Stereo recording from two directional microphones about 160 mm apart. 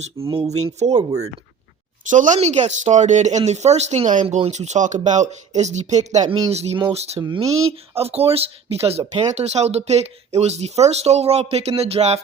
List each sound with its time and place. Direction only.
0.3 s speech: 30° right (ahead or behind)
0.5 s speech: 45° right (ahead or behind)
2.0 s speech: 50° right (ahead or behind)
7.2 s speech: 25° right (ahead or behind)